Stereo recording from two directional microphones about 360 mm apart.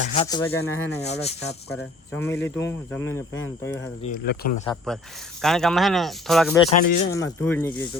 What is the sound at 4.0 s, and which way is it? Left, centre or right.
Speech, left.